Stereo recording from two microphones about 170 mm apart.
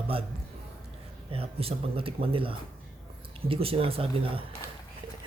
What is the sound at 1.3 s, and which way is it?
A man's voice, 35° right (ahead or behind).